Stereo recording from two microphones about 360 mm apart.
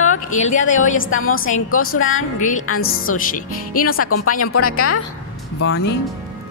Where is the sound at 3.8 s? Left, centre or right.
Left.